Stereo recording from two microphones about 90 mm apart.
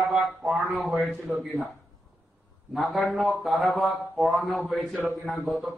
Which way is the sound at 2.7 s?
Centre (ahead or behind).